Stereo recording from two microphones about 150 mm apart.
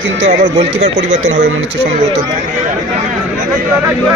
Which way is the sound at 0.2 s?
50° right (ahead or behind).